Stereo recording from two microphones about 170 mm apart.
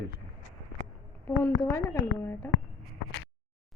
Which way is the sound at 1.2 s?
10° left (ahead or behind).